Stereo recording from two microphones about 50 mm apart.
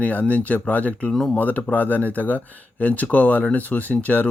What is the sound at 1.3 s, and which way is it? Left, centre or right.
Speech, left.